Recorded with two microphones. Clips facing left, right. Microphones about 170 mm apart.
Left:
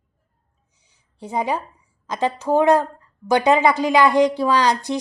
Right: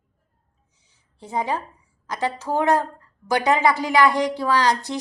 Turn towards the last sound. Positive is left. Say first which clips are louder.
# left 2 dB
turn(degrees=20)  # may be behind; listen again after turning